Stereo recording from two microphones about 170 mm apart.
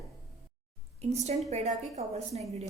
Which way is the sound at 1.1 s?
40° right (ahead or behind).